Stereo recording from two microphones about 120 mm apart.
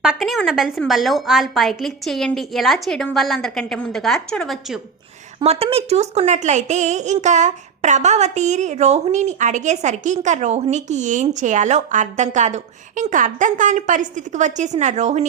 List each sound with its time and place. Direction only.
0.0 s a woman's voice: 5° right (ahead or behind)
5.4 s a woman's voice: 55° right (ahead or behind); by 15.3 s 75° right (ahead or behind)